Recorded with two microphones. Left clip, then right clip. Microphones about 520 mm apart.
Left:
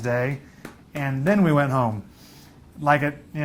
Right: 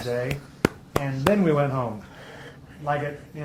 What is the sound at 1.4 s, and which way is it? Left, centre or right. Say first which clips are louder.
Speech: left 2 dB; left.